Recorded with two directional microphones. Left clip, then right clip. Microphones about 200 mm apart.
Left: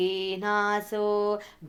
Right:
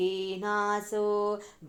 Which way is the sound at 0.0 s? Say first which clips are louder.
Left 3 dB; 30° left (ahead or behind).